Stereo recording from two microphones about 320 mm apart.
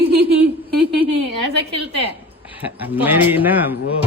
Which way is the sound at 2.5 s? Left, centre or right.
Centre.